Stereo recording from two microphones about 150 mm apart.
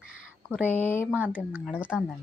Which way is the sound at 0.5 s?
10° left (ahead or behind).